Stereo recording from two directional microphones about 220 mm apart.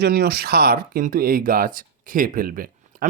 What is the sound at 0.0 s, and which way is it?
A man's voice, 45° right (ahead or behind).